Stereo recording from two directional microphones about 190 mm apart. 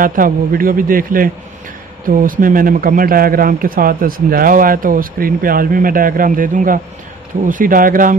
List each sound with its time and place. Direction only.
0.0 s speech: 45° right (ahead or behind)